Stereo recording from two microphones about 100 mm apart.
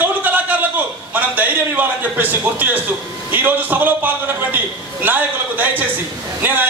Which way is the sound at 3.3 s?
20° right (ahead or behind).